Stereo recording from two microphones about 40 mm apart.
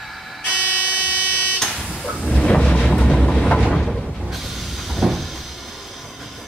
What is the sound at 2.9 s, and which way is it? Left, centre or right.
Train, left.